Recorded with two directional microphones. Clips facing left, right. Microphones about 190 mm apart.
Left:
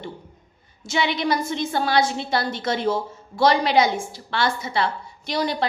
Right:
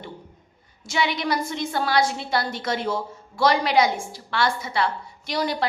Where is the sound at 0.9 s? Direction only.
25° left (ahead or behind).